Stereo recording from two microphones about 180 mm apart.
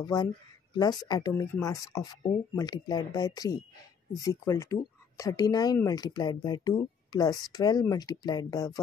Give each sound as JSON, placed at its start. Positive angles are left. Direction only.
{"t": 0.0, "sound": "speech", "side_deg": 20}